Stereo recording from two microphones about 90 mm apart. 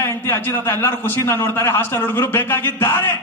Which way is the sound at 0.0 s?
25° left (ahead or behind).